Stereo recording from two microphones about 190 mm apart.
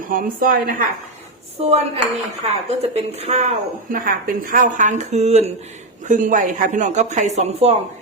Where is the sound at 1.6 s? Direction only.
30° right (ahead or behind).